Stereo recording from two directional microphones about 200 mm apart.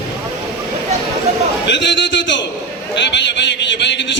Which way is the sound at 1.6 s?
60° left (ahead or behind).